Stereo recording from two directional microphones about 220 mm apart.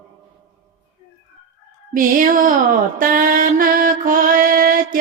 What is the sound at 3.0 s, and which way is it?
Mantra, 40° right (ahead or behind).